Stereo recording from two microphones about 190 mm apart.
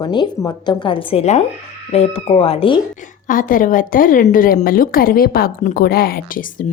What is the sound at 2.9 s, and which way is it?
A woman's voice, 45° left (ahead or behind).